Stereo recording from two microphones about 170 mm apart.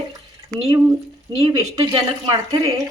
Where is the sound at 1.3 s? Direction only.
25° right (ahead or behind).